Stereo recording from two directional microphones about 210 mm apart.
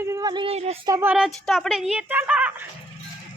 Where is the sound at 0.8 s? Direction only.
10° right (ahead or behind).